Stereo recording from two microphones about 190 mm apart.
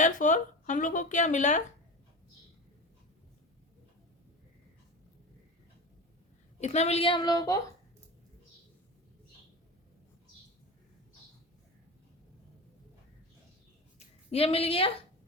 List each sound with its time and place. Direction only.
0.0 s speech: 40° left (ahead or behind)
6.6 s a woman's voice: 35° left (ahead or behind); by 7.6 s 20° left (ahead or behind)
14.3 s speech: 30° left (ahead or behind)